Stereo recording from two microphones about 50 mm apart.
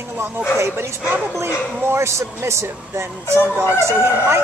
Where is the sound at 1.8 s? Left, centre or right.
Right.